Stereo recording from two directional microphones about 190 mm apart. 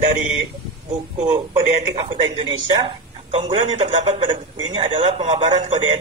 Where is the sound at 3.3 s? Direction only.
35° right (ahead or behind).